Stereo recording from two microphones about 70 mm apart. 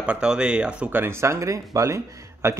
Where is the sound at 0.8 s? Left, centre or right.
Right.